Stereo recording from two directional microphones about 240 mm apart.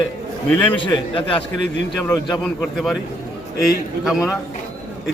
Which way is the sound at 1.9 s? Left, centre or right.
Centre.